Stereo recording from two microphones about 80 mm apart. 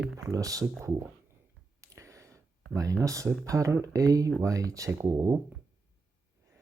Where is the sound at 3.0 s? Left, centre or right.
Right.